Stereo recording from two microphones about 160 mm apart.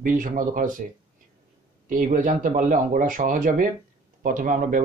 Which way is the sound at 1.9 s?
55° right (ahead or behind).